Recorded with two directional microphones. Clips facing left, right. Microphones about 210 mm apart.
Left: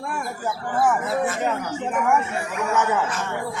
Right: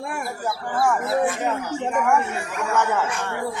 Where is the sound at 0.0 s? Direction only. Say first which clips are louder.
Even; 10° right (ahead or behind).